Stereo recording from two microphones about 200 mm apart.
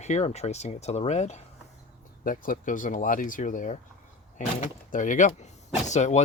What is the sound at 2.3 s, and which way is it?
Speech, 45° left (ahead or behind).